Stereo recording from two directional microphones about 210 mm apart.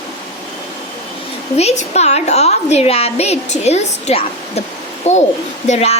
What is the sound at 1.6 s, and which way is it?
A woman's voice, 30° left (ahead or behind).